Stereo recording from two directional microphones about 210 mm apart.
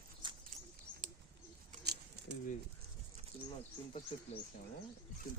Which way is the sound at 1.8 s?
50° right (ahead or behind).